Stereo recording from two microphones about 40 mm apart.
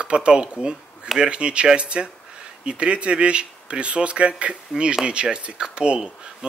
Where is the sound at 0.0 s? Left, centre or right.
Right.